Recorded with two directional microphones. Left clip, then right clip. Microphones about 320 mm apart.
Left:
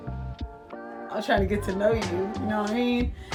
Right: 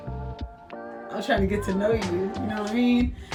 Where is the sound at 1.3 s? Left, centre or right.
Centre.